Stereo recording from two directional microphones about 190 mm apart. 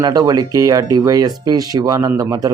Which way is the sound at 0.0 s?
20° right (ahead or behind).